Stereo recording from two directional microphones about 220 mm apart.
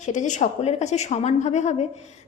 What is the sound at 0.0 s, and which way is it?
A woman's voice, 35° left (ahead or behind).